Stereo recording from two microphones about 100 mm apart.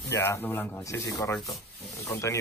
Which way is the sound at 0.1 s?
25° left (ahead or behind).